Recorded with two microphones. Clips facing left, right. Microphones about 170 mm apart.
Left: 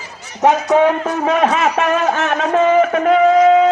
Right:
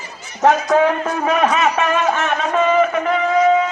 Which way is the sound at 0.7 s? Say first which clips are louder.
Left 2 dB; 25° left (ahead or behind).